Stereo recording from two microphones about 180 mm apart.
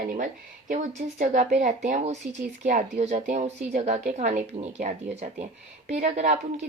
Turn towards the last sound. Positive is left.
turn(degrees=-40)  # may be behind; listen again after turning